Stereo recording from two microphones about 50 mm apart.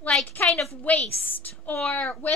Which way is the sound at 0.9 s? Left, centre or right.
Left.